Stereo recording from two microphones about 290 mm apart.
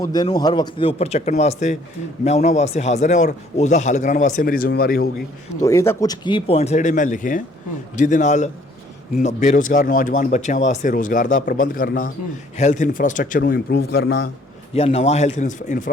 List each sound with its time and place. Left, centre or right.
0.0 s speech: centre; by 5.0 s left
5.6 s speech: centre; by 14.3 s left
14.7 s speech: left